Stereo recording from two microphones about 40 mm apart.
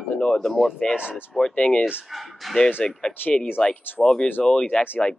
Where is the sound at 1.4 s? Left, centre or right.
Left.